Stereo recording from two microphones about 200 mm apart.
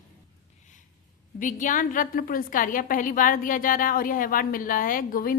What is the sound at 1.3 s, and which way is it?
A woman's voice, 40° left (ahead or behind).